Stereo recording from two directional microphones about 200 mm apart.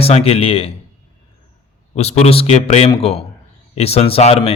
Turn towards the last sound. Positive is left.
turn(degrees=30)  # may be behind; listen again after turning